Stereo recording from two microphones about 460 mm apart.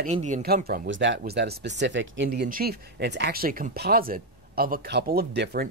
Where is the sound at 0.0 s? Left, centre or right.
Centre.